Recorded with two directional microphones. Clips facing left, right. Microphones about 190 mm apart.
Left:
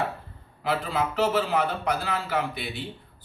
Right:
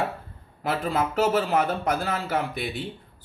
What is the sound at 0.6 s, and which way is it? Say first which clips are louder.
Speech: right 1 dB; 45° right (ahead or behind).